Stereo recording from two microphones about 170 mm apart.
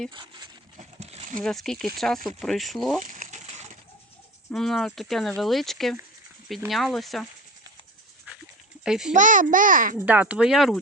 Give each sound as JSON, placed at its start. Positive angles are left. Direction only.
{"t": 0.1, "sound": "speech", "side_deg": -25}
{"t": 0.8, "sound": "a sound", "side_deg": -40}
{"t": 1.4, "sound": "speech", "side_deg": 5}
{"t": 3.0, "sound": "a sound", "side_deg": -50}
{"t": 4.5, "sound": "speech", "side_deg": 0}
{"t": 8.8, "sound": "a child's voice", "side_deg": -5}
{"t": 9.1, "sound": "a child's voice", "side_deg": -50}
{"t": 10.1, "sound": "speech", "side_deg": -10}